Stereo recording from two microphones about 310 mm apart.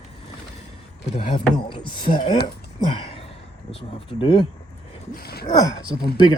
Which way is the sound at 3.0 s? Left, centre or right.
Centre.